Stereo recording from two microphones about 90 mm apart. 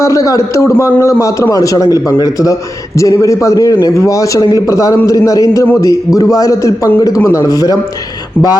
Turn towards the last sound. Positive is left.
turn(degrees=45)  # may be behind; listen again after turning